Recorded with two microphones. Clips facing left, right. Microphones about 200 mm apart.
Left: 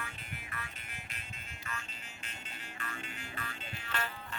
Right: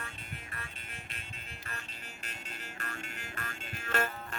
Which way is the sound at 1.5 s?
35° right (ahead or behind).